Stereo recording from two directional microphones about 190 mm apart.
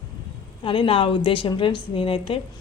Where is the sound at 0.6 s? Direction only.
25° left (ahead or behind).